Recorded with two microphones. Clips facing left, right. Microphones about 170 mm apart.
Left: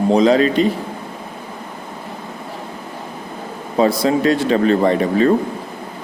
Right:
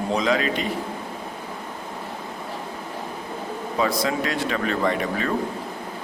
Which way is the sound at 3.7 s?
30° left (ahead or behind).